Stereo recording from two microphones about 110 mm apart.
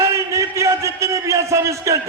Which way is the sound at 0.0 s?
25° right (ahead or behind).